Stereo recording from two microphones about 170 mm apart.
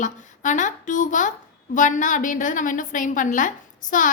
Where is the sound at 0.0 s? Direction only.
45° left (ahead or behind).